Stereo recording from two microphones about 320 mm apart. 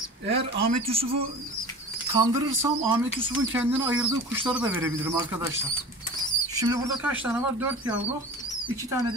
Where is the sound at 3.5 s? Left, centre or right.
Centre.